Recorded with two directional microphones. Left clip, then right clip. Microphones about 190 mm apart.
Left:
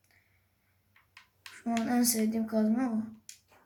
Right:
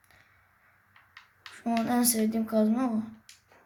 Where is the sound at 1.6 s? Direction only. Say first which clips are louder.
Right 3 dB; 55° right (ahead or behind).